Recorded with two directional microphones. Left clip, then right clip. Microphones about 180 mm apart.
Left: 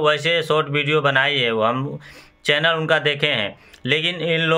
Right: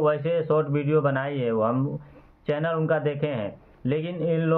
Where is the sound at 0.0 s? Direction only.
15° left (ahead or behind).